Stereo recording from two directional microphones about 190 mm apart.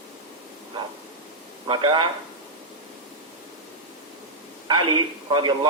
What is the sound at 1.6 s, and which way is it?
Speech, 25° right (ahead or behind).